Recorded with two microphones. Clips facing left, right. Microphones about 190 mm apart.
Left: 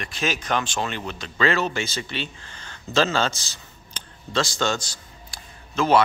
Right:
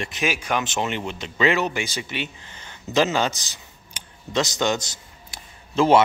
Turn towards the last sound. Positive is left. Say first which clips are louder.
# right 3 dB
turn(degrees=-25)  # may be behind; listen again after turning